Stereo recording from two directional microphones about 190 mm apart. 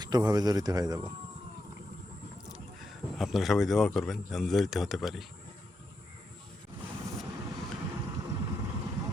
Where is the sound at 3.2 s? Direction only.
Centre (ahead or behind).